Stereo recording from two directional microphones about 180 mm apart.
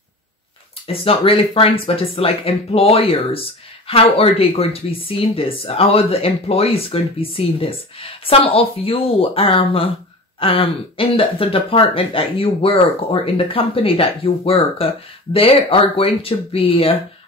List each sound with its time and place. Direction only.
0.8 s speech: 30° left (ahead or behind)